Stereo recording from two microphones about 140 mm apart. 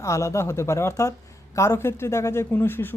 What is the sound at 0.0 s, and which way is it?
Speech, 20° left (ahead or behind).